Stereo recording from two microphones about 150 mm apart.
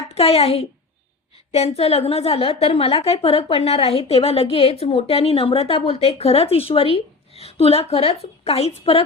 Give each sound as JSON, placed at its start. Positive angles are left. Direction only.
{"t": 0.1, "sound": "a woman's voice", "side_deg": 45}